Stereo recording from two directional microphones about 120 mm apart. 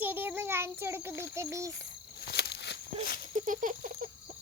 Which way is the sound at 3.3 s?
90° right.